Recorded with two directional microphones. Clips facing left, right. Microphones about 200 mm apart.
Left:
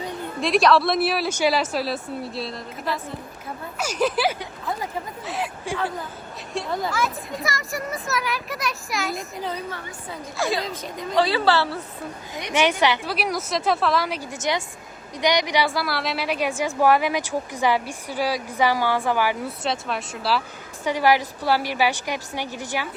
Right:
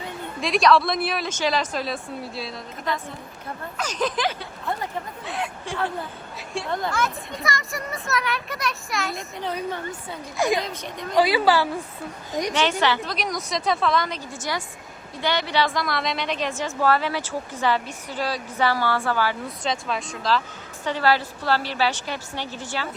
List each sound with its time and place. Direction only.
0.4 s a woman's voice: centre (ahead or behind)
10.3 s a woman's voice: 15° right (ahead or behind)
12.8 s speech: 10° left (ahead or behind)
14.3 s a woman's voice: 20° left (ahead or behind)